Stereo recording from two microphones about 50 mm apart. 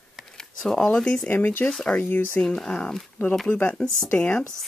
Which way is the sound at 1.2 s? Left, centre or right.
Left.